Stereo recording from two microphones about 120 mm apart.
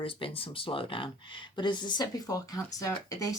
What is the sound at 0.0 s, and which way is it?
Speech, 50° left (ahead or behind).